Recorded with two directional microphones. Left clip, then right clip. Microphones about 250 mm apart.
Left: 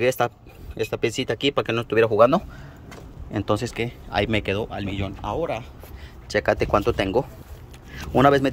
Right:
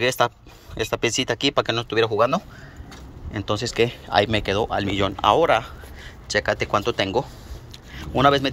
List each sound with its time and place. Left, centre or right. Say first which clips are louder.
0.0 s speech: right 1 dB; centre
3.7 s speech: right 6 dB; centre
6.2 s speech: left 1 dB; centre